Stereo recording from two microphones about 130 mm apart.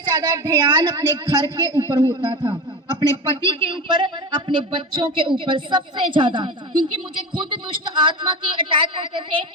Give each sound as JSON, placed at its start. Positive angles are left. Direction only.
{"t": 0.0, "sound": "a woman's voice", "side_deg": -30}